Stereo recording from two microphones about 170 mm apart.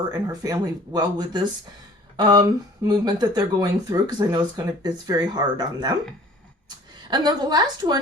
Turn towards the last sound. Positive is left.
turn(degrees=-25)  # may be behind; listen again after turning